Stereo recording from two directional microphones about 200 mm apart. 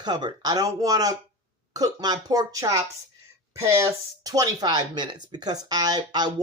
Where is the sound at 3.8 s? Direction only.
20° right (ahead or behind).